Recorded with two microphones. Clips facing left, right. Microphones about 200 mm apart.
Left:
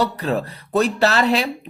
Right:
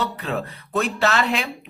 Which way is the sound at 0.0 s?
40° left (ahead or behind).